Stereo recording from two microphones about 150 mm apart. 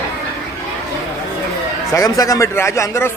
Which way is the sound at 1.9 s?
20° left (ahead or behind).